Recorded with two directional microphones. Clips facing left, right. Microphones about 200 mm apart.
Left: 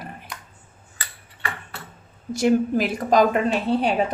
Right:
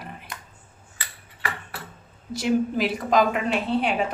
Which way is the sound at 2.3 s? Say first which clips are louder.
Left 4 dB; 50° left (ahead or behind).